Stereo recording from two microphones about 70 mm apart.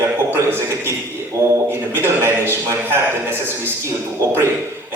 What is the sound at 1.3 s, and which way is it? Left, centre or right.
Speech, right.